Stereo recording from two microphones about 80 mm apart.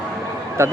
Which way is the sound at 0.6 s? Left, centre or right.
Right.